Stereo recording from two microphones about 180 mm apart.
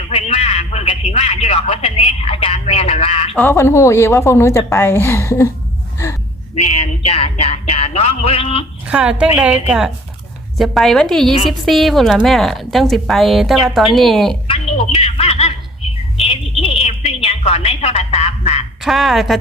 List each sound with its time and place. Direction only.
0.1 s a sound: 35° left (ahead or behind)
3.3 s a woman's voice: 15° left (ahead or behind)
6.6 s music: 35° left (ahead or behind)
8.9 s a woman's voice: 5° right (ahead or behind)
14.4 s a sound: 30° left (ahead or behind)
18.8 s a woman's voice: centre (ahead or behind)